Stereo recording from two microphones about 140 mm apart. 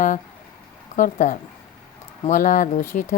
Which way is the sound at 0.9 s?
70° left (ahead or behind).